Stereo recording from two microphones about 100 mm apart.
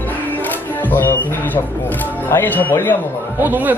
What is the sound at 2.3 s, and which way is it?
Speech, 20° left (ahead or behind).